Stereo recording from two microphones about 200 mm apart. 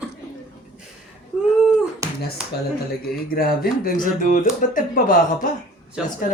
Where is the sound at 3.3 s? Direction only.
45° left (ahead or behind).